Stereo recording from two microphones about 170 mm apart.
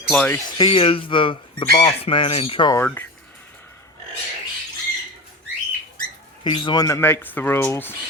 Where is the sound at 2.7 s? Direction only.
10° left (ahead or behind).